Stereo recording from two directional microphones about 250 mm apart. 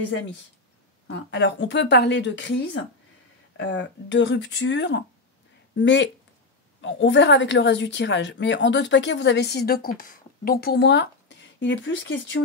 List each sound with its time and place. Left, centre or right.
1.0 s speech: left